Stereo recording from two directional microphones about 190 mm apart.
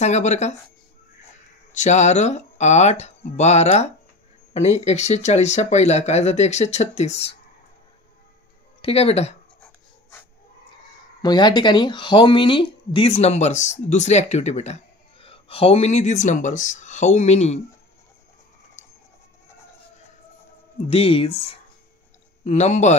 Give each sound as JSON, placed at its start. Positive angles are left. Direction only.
{"t": 0.0, "sound": "speech", "side_deg": 35}
{"t": 1.7, "sound": "speech", "side_deg": 40}
{"t": 8.8, "sound": "speech", "side_deg": 30}
{"t": 11.2, "sound": "speech", "side_deg": 25}
{"t": 18.8, "sound": "a sound", "side_deg": 40}
{"t": 20.9, "sound": "speech", "side_deg": 30}